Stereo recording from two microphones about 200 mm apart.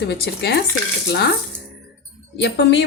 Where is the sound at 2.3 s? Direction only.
60° left (ahead or behind).